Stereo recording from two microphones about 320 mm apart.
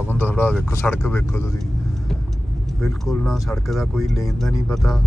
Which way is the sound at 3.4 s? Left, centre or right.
Centre.